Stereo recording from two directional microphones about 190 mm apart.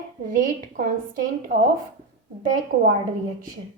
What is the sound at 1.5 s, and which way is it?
Speech, 45° right (ahead or behind).